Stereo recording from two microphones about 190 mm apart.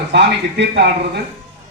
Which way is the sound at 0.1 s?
65° right (ahead or behind).